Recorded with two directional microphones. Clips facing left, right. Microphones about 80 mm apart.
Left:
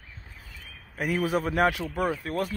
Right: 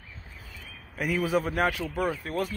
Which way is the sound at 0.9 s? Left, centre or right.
Left.